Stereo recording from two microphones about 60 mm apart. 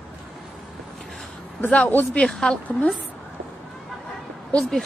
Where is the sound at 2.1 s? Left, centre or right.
Centre.